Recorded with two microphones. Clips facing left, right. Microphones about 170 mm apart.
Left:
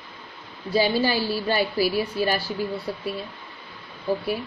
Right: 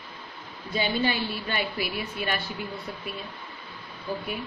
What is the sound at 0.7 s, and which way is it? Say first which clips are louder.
A woman's voice: left 5 dB; 35° left (ahead or behind).